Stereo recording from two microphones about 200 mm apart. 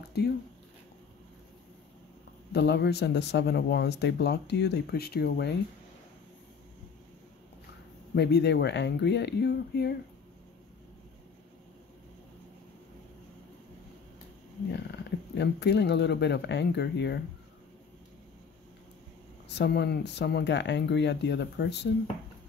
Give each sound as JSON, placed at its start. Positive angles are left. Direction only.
{"t": 0.2, "sound": "speech", "side_deg": 55}
{"t": 2.5, "sound": "speech", "side_deg": 55}
{"t": 8.1, "sound": "speech", "side_deg": 55}
{"t": 14.7, "sound": "speech", "side_deg": 60}
{"t": 19.5, "sound": "speech", "side_deg": 55}